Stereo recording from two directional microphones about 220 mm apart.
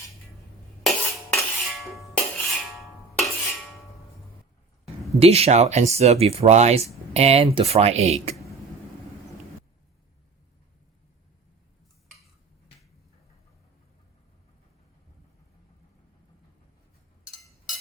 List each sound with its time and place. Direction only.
0.9 s music: centre (ahead or behind)
2.7 s a sound: centre (ahead or behind)
5.2 s speech: 30° right (ahead or behind)